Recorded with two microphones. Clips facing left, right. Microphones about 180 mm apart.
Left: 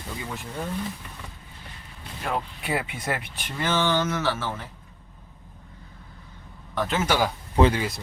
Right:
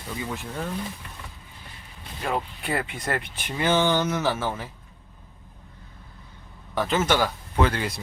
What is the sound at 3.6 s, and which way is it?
Speech, 15° right (ahead or behind).